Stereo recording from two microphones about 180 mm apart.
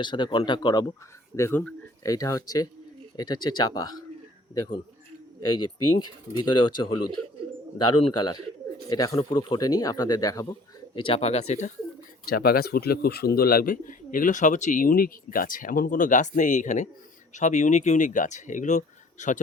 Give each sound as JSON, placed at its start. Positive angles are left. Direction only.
{"t": 0.0, "sound": "speech", "side_deg": 25}
{"t": 1.4, "sound": "speech", "side_deg": 10}
{"t": 10.9, "sound": "speech", "side_deg": 30}
{"t": 12.3, "sound": "speech", "side_deg": 55}